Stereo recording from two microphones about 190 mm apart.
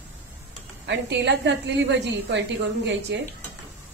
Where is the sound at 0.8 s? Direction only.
65° right (ahead or behind).